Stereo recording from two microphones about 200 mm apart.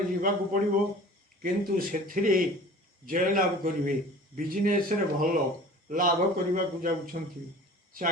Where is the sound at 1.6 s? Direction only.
45° right (ahead or behind).